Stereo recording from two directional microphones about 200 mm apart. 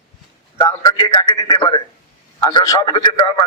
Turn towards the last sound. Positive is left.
turn(degrees=25)  # may be behind; listen again after turning